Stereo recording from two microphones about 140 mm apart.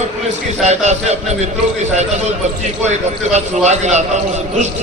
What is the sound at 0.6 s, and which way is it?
A man's voice, 55° right (ahead or behind).